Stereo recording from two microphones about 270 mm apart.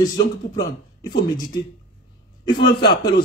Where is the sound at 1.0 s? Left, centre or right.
Centre.